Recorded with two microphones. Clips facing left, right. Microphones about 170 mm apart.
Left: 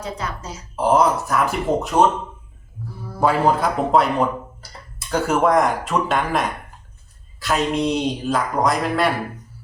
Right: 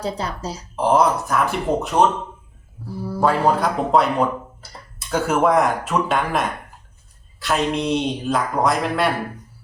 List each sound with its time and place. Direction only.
0.0 s speech: 35° right (ahead or behind)
0.8 s speech: centre (ahead or behind)
3.2 s speech: 5° left (ahead or behind)